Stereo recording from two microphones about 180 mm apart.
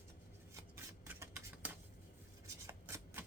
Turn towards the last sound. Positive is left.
turn(degrees=-15)  # may be behind; listen again after turning